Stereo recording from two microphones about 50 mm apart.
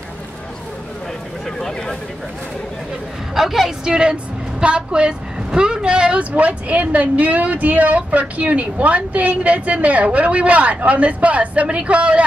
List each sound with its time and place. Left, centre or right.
1.6 s speech: centre
3.3 s a woman's voice: centre
3.9 s speech: centre